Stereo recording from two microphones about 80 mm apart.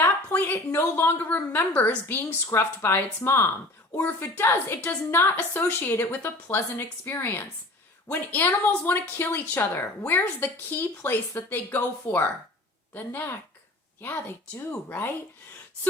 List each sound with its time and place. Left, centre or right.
0.0 s a woman's voice: left